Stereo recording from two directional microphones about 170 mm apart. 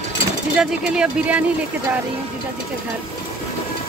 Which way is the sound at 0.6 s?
5° right (ahead or behind).